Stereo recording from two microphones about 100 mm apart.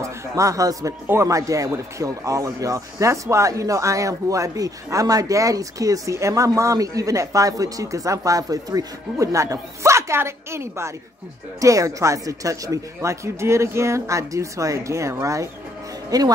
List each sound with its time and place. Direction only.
0.0 s a man's voice: 35° right (ahead or behind)